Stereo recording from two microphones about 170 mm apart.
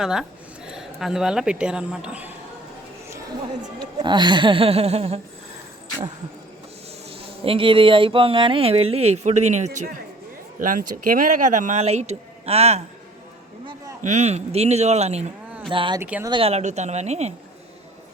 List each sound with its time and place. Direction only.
0.0 s speech: 5° right (ahead or behind)
4.0 s speech: 25° right (ahead or behind)
7.1 s speech: 30° right (ahead or behind)
10.6 s speech: 55° right (ahead or behind)
14.0 s speech: 45° right (ahead or behind)
16.0 s speech: 10° right (ahead or behind)
16.2 s speech: 30° right (ahead or behind)